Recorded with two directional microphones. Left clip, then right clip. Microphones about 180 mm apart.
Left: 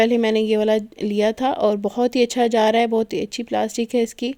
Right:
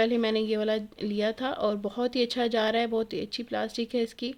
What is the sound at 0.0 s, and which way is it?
Speech, 40° left (ahead or behind).